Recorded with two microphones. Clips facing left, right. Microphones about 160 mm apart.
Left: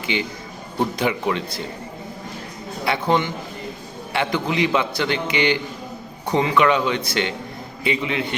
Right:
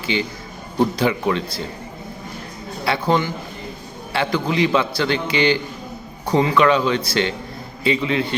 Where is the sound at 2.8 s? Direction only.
20° left (ahead or behind).